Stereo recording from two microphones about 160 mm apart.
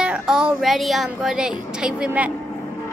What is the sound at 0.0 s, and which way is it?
A woman's voice, 5° right (ahead or behind).